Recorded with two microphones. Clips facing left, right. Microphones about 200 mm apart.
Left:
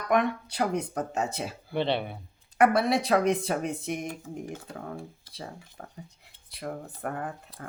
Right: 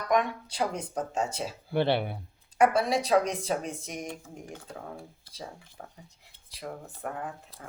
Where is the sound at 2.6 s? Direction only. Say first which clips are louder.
Left 1 dB; 65° left (ahead or behind).